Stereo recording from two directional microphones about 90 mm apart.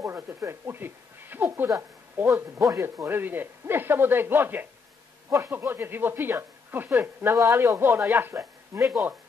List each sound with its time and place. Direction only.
0.0 s speech: 25° right (ahead or behind)
7.3 s speech: 35° right (ahead or behind)
8.4 s speech: 35° right (ahead or behind)